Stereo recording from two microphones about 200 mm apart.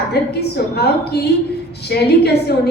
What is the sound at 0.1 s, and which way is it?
A woman's voice, 55° left (ahead or behind).